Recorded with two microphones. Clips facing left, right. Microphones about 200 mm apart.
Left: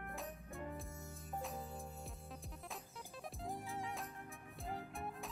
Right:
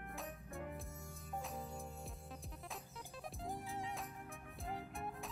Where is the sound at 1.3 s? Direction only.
Centre (ahead or behind).